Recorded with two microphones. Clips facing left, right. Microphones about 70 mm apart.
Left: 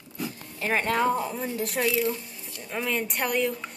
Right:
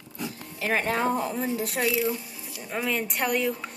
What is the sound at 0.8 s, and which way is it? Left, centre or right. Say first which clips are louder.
Speech: left 4 dB; right.